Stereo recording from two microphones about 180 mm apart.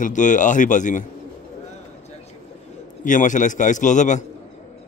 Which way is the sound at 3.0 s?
45° left (ahead or behind).